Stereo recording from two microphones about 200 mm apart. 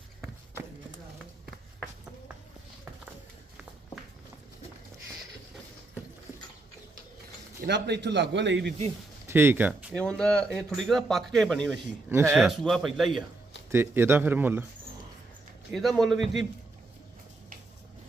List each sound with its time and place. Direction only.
7.6 s a man's voice: 60° right (ahead or behind)
9.2 s speech: 10° right (ahead or behind)
9.9 s speech: 5° left (ahead or behind)
12.0 s speech: 10° right (ahead or behind)
12.4 s speech: centre (ahead or behind)
13.7 s speech: 10° right (ahead or behind)
15.7 s speech: centre (ahead or behind)